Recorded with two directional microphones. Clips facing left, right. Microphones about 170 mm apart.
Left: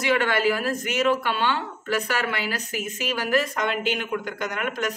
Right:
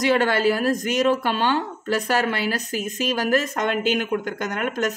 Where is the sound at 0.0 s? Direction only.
40° right (ahead or behind).